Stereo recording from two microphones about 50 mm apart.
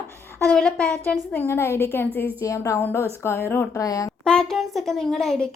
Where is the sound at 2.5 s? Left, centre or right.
Left.